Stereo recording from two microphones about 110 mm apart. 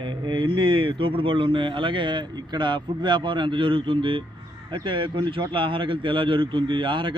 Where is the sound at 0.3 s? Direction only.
50° right (ahead or behind).